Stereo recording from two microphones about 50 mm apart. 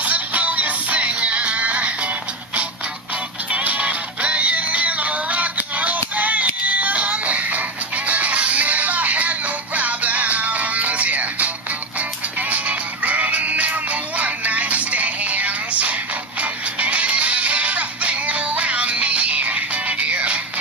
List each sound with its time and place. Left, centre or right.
0.0 s music: right
3.5 s music: right